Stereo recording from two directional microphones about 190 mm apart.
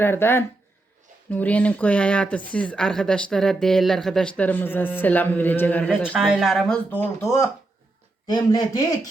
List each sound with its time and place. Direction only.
0.0 s speech: 10° left (ahead or behind)
6.1 s speech: centre (ahead or behind); by 9.0 s 20° left (ahead or behind)